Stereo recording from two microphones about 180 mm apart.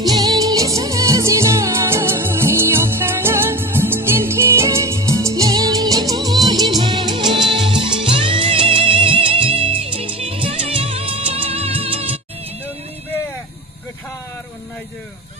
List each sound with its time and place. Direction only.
0.0 s music: 20° right (ahead or behind)